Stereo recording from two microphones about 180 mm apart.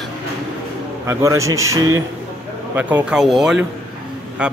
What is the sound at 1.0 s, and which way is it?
A man's voice, 15° right (ahead or behind).